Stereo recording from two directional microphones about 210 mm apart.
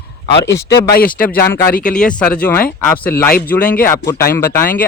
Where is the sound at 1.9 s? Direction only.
5° left (ahead or behind).